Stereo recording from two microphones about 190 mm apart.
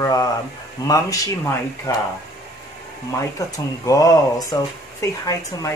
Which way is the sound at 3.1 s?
15° left (ahead or behind).